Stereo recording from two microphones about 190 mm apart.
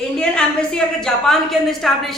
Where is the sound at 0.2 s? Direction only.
5° left (ahead or behind).